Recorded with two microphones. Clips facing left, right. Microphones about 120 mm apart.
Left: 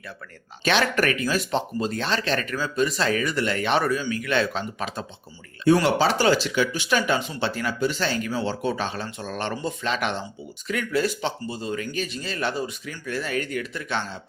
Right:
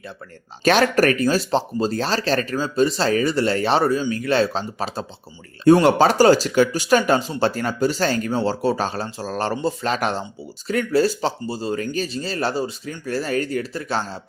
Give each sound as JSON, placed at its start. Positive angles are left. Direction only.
{"t": 0.6, "sound": "speech", "side_deg": -40}
{"t": 5.8, "sound": "speech", "side_deg": -45}